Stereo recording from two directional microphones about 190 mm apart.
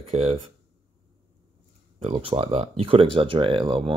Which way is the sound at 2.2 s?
30° right (ahead or behind).